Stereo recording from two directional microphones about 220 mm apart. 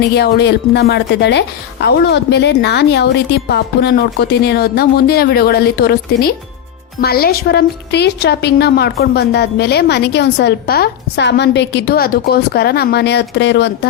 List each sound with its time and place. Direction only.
0.1 s a woman's voice: 50° left (ahead or behind)